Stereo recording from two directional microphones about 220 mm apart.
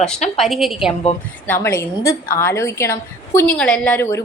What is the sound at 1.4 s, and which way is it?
A woman's voice, 10° left (ahead or behind).